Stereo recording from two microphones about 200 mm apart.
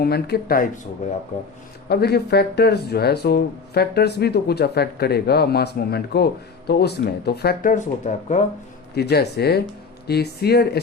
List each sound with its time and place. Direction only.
0.0 s speech: 50° left (ahead or behind)
1.9 s speech: 55° left (ahead or behind); by 8.4 s 40° left (ahead or behind)
9.0 s speech: 55° left (ahead or behind)